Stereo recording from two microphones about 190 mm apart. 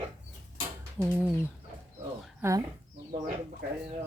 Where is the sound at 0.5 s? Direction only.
10° right (ahead or behind).